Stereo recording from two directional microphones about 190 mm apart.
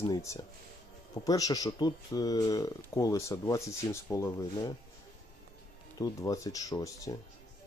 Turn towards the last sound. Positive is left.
turn(degrees=20)  # may be behind; listen again after turning